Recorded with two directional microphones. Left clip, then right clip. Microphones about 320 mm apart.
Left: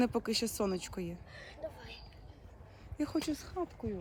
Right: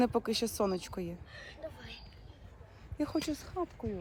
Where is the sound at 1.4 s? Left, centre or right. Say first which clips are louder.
Left 3 dB; left.